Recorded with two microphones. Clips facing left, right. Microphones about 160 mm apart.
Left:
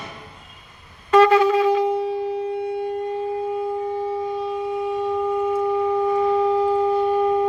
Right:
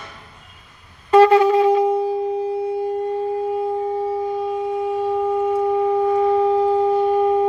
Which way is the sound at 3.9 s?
30° right (ahead or behind).